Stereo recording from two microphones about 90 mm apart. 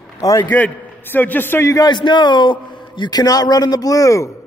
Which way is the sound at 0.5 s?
20° left (ahead or behind).